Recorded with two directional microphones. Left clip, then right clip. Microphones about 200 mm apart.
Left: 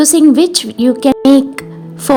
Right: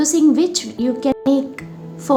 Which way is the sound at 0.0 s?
45° left (ahead or behind).